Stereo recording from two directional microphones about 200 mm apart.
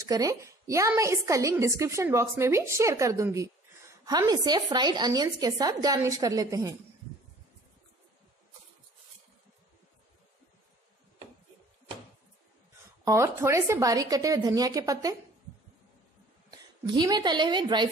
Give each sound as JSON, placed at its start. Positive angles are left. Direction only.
{"t": 0.0, "sound": "a woman's voice", "side_deg": -15}
{"t": 13.0, "sound": "a woman's voice", "side_deg": -15}
{"t": 16.4, "sound": "a woman's voice", "side_deg": -20}